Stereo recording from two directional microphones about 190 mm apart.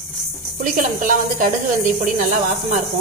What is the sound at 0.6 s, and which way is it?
Speech, 45° right (ahead or behind).